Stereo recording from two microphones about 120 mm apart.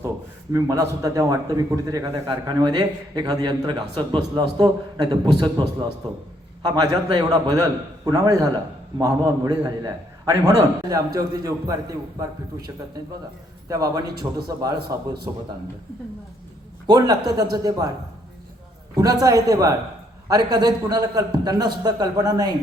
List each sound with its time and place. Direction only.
0.5 s a man's voice: 25° right (ahead or behind)
13.7 s a man's voice: 30° right (ahead or behind)
16.8 s a man's voice: 35° right (ahead or behind)
18.9 s a man's voice: 30° right (ahead or behind)